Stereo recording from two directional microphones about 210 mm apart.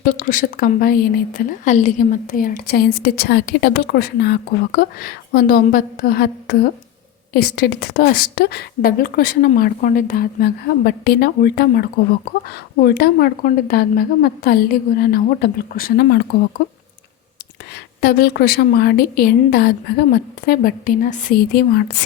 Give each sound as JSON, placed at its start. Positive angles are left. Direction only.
{"t": 0.0, "sound": "speech", "side_deg": 40}
{"t": 18.0, "sound": "speech", "side_deg": 50}